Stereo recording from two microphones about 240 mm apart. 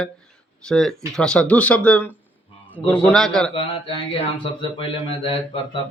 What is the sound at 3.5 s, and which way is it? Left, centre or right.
Speech, left.